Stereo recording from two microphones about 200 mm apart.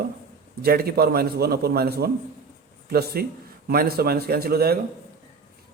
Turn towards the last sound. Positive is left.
turn(degrees=-50)  # may be behind; listen again after turning